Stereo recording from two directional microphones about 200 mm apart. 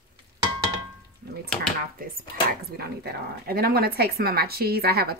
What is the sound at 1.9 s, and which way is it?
Speech, 45° right (ahead or behind).